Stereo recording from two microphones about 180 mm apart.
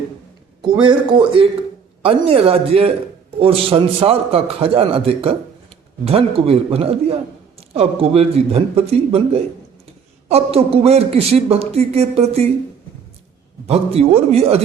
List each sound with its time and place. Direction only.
0.6 s speech: 25° right (ahead or behind)
10.2 s speech: 35° right (ahead or behind)
13.7 s speech: 35° right (ahead or behind)